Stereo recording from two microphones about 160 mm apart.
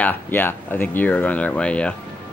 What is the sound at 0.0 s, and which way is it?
Speech, 10° left (ahead or behind).